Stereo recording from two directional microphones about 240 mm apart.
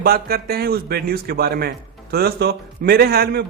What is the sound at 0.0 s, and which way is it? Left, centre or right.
A man's voice, right.